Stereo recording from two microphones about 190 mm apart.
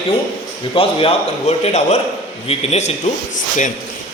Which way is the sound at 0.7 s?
30° left (ahead or behind).